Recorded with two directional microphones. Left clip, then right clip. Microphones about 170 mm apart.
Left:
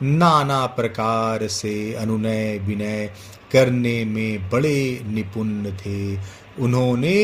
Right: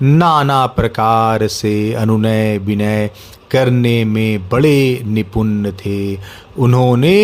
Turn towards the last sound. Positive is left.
turn(degrees=-50)  # may be behind; listen again after turning